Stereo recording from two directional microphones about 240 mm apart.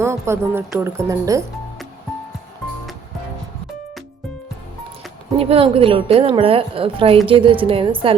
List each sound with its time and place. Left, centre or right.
0.0 s speech: centre
5.4 s a woman's voice: right